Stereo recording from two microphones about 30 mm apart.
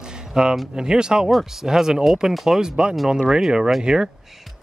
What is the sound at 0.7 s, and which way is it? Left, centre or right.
Speech, right.